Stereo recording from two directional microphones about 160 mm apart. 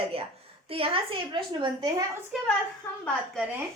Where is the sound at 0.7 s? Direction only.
35° right (ahead or behind).